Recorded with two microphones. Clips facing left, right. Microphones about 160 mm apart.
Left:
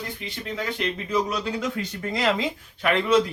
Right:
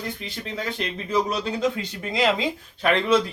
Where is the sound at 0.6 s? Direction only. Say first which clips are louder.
Left 2 dB; 30° right (ahead or behind).